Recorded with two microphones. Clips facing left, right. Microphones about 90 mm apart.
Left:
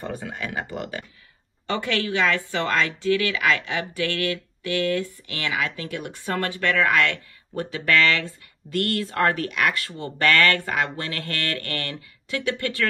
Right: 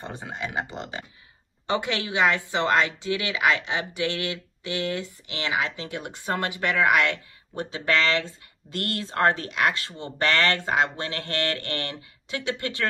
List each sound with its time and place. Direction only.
0.0 s a woman's voice: 25° right (ahead or behind)